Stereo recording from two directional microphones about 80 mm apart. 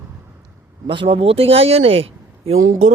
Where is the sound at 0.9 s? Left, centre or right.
Right.